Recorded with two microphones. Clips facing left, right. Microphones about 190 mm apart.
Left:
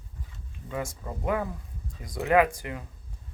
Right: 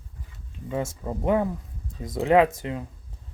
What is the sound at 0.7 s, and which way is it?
Speech, 25° right (ahead or behind).